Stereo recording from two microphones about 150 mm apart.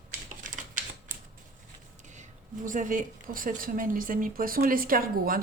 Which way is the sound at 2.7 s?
60° right (ahead or behind).